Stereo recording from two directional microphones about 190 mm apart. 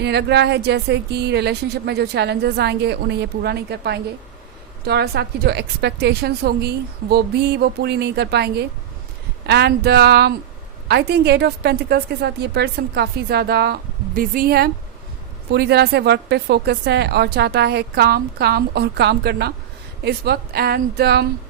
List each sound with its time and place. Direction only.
0.0 s speech: 60° right (ahead or behind)